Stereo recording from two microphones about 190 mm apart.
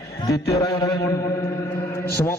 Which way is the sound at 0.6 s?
20° left (ahead or behind).